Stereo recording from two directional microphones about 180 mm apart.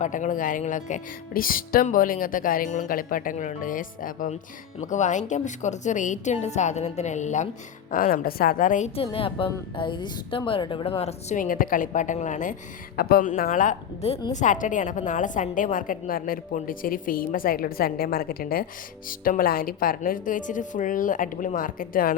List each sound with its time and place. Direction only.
0.0 s a woman's voice: 45° left (ahead or behind)
9.0 s a woman's voice: 30° left (ahead or behind)
13.0 s speech: 55° left (ahead or behind)